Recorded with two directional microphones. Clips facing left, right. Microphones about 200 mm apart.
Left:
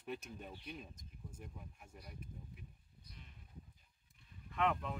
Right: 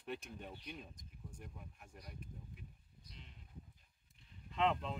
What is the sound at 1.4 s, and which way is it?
Speech, 5° left (ahead or behind).